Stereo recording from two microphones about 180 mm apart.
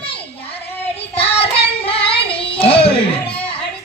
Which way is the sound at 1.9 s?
30° left (ahead or behind).